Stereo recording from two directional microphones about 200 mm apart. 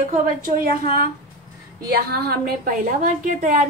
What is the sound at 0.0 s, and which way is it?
Speech, 40° right (ahead or behind).